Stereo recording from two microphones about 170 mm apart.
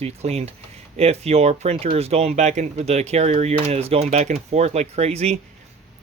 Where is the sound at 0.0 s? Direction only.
40° right (ahead or behind).